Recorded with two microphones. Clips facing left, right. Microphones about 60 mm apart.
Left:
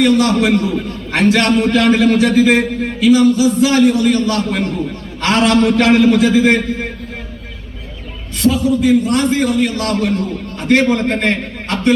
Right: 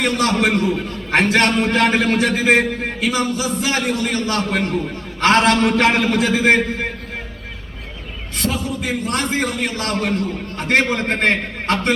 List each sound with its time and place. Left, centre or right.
0.0 s a man's voice: right
8.4 s a man's voice: right